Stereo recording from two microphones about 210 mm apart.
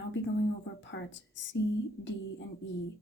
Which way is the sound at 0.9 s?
55° left (ahead or behind).